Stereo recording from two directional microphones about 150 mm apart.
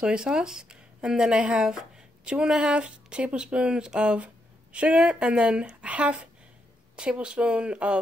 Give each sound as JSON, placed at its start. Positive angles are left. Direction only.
{"t": 0.0, "sound": "speech", "side_deg": -5}